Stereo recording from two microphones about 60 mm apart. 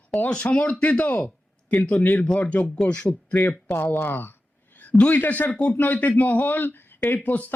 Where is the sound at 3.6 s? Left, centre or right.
Left.